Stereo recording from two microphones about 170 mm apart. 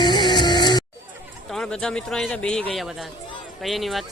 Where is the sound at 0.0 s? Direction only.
25° left (ahead or behind).